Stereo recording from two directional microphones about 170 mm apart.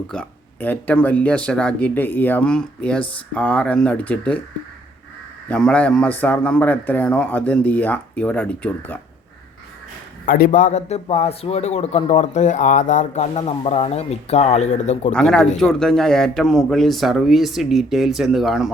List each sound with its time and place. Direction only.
0.1 s a man's voice: 10° left (ahead or behind)
5.5 s a man's voice: 5° left (ahead or behind)
10.2 s a man's voice: 60° left (ahead or behind)
15.1 s speech: 5° left (ahead or behind)